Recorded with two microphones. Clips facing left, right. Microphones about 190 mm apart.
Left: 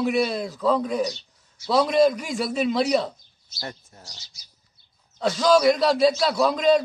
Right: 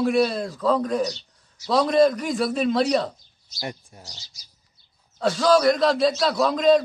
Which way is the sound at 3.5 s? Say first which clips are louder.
Right 3 dB; 15° right (ahead or behind).